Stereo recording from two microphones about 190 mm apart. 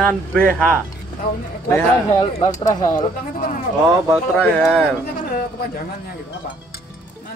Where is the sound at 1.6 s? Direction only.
15° left (ahead or behind).